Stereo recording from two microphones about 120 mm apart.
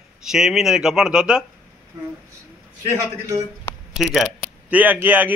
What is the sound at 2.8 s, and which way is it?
Speech, 25° right (ahead or behind).